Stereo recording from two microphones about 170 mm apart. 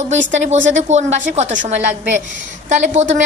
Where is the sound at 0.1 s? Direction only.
45° right (ahead or behind).